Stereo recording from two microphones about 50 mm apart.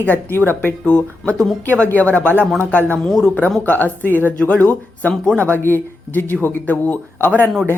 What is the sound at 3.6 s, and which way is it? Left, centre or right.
A woman's voice, left.